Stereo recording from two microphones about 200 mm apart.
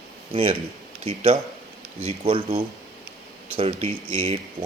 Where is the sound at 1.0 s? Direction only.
30° right (ahead or behind).